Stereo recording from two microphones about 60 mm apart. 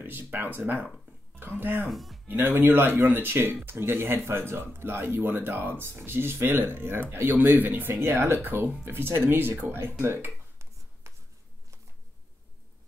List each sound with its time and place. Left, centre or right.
0.0 s speech: right
1.9 s speech: centre
2.2 s speech: right